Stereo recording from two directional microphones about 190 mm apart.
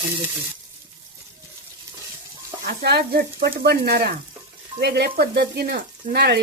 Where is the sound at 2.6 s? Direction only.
55° right (ahead or behind).